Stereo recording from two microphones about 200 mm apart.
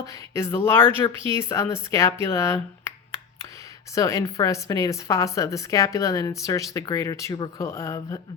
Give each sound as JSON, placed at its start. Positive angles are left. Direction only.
{"t": 0.0, "sound": "a woman's voice", "side_deg": 15}
{"t": 3.9, "sound": "a woman's voice", "side_deg": 15}